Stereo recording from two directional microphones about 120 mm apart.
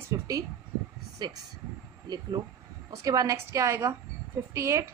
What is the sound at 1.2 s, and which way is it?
A woman's voice, 35° right (ahead or behind).